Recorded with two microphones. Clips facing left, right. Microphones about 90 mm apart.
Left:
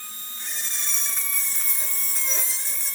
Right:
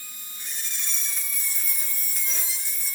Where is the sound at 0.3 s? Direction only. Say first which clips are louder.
Left 3 dB; 60° left (ahead or behind).